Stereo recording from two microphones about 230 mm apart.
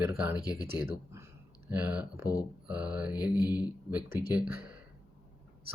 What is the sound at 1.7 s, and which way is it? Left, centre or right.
Speech, centre.